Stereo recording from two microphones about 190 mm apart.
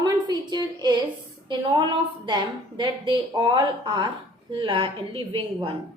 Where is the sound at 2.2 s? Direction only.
25° right (ahead or behind).